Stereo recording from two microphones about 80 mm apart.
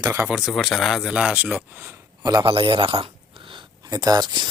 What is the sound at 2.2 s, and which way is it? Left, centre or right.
Speech, right.